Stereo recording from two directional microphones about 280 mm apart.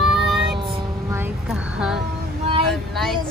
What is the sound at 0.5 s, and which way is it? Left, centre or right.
Child singing, centre.